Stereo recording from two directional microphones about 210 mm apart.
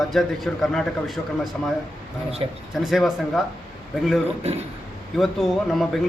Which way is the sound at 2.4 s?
25° right (ahead or behind).